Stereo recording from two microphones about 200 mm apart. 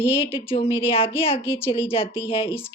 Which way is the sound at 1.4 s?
10° left (ahead or behind).